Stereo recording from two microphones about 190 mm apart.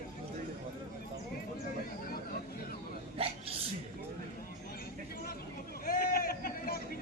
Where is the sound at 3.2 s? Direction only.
30° right (ahead or behind).